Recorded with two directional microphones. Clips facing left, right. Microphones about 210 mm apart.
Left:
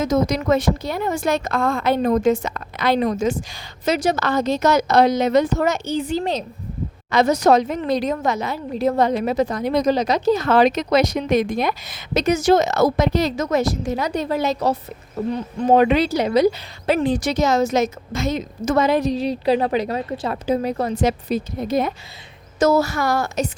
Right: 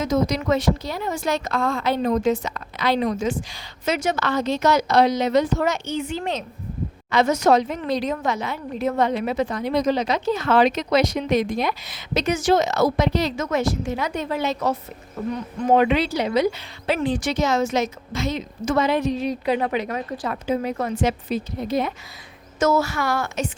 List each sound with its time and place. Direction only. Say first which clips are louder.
0.0 s a woman's voice: left 2 dB; 45° left (ahead or behind)